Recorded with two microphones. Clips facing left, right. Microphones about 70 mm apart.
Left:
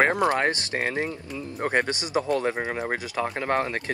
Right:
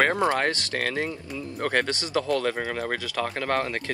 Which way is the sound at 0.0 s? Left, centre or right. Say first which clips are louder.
Left 1 dB; left.